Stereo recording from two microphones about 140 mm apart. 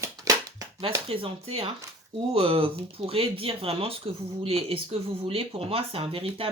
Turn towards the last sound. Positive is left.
turn(degrees=-40)  # may be behind; listen again after turning